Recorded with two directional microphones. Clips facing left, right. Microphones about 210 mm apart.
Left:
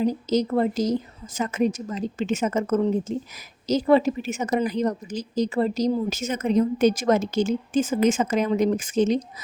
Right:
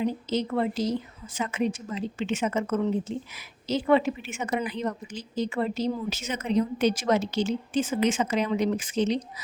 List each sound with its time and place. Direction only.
0.0 s a woman's voice: 40° left (ahead or behind)